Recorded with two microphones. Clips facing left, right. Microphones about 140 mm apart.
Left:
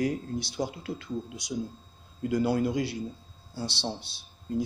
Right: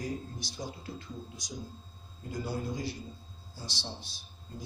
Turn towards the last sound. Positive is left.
turn(degrees=70)  # may be behind; listen again after turning